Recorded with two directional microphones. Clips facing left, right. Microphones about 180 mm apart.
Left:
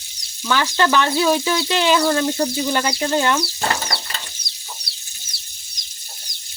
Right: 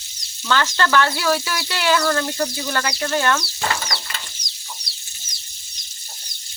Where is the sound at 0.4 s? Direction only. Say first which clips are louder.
Left 2 dB; 10° left (ahead or behind).